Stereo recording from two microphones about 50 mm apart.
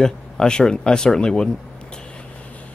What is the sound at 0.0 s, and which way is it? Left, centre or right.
Speech, centre.